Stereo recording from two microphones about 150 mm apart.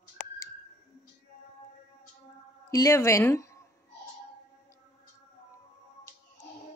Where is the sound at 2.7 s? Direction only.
20° left (ahead or behind).